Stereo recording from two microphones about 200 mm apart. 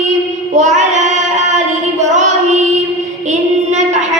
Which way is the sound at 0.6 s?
35° right (ahead or behind).